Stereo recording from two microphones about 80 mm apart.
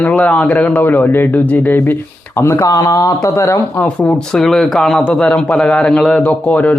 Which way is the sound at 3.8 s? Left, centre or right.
Centre.